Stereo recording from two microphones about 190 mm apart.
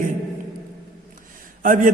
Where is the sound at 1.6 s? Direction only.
45° right (ahead or behind).